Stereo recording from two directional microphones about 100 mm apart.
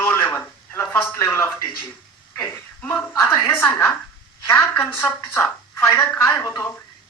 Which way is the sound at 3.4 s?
20° left (ahead or behind).